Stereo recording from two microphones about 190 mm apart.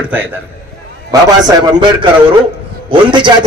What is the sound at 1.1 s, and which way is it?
A man's voice, 25° right (ahead or behind).